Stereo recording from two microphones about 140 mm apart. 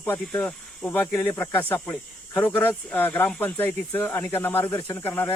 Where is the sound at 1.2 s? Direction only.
20° left (ahead or behind).